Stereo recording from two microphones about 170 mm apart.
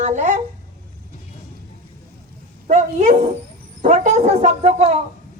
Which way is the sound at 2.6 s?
45° right (ahead or behind).